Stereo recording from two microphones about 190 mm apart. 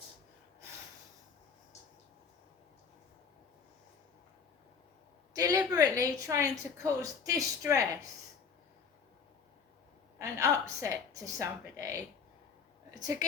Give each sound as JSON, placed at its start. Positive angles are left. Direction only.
{"t": 5.3, "sound": "a woman's voice", "side_deg": -20}
{"t": 10.2, "sound": "a woman's voice", "side_deg": -15}